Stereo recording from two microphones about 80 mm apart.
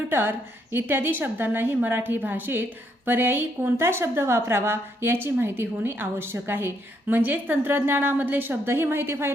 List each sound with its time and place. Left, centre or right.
0.1 s a woman's voice: right